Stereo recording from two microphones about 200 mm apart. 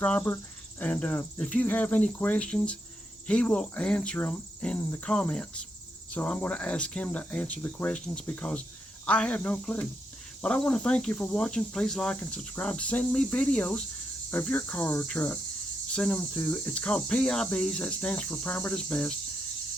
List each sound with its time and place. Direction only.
0.0 s cricket: 10° left (ahead or behind)
3.2 s speech: 5° left (ahead or behind)
6.1 s cricket: 5° left (ahead or behind)
10.4 s speech: 5° left (ahead or behind)
14.3 s cricket: 10° left (ahead or behind)